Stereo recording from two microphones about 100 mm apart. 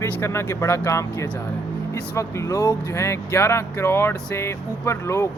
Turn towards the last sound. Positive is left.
turn(degrees=30)  # may be behind; listen again after turning